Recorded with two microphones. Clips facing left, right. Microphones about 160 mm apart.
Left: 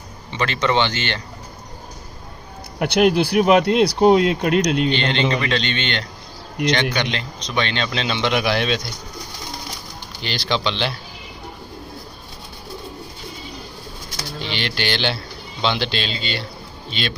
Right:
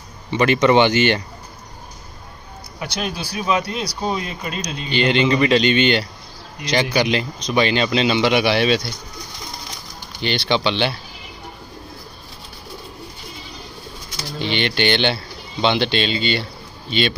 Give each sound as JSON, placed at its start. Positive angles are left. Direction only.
{"t": 0.4, "sound": "speech", "side_deg": -10}
{"t": 2.8, "sound": "speech", "side_deg": 65}
{"t": 4.9, "sound": "speech", "side_deg": -5}
{"t": 10.2, "sound": "speech", "side_deg": 0}
{"t": 14.5, "sound": "speech", "side_deg": 0}